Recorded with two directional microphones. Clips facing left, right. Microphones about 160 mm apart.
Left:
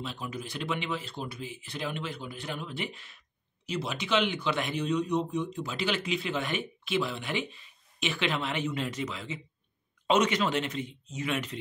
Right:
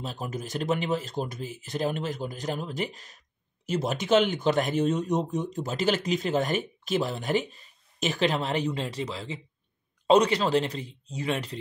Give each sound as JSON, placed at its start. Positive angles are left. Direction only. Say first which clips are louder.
{"t": 0.0, "sound": "speech", "louder": "right 3 dB", "side_deg": -40}